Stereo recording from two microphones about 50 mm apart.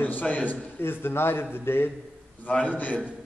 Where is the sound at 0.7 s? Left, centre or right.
Left.